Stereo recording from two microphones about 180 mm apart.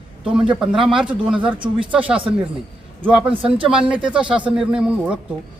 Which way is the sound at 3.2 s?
30° right (ahead or behind).